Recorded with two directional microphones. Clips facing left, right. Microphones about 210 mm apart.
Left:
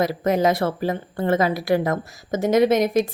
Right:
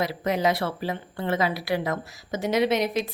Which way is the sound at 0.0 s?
45° left (ahead or behind).